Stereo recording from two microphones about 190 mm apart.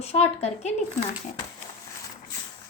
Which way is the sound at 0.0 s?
35° left (ahead or behind).